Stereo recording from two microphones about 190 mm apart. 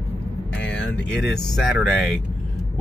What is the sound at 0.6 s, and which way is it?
Speech, 10° left (ahead or behind).